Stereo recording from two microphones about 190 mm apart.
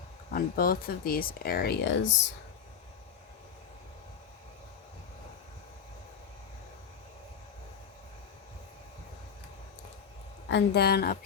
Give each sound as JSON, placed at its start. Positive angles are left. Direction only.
{"t": 0.3, "sound": "speech", "side_deg": 50}
{"t": 10.5, "sound": "speech", "side_deg": 55}